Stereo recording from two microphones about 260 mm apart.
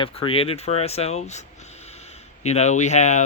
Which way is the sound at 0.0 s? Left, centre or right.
Left.